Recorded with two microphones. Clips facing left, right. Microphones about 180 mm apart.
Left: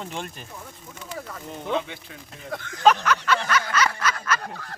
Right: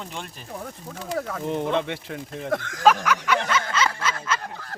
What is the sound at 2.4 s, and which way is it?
Speech, 90° right.